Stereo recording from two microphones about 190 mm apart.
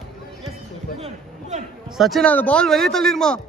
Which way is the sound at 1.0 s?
35° right (ahead or behind).